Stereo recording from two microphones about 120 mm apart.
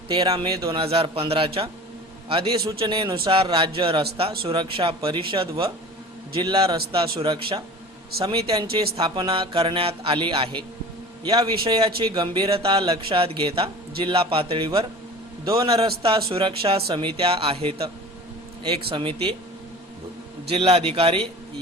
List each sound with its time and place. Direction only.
0.1 s a man's voice: 35° right (ahead or behind)
0.7 s a man's voice: 50° right (ahead or behind)
2.3 s a man's voice: 35° right (ahead or behind)
6.3 s a man's voice: 35° right (ahead or behind)
6.9 s a man's voice: 50° right (ahead or behind)
8.7 s a man's voice: 40° right (ahead or behind)
11.2 s a man's voice: 30° right (ahead or behind)
11.8 s a man's voice: 45° right (ahead or behind)
16.0 s a man's voice: 50° right (ahead or behind)
20.5 s a man's voice: 55° right (ahead or behind)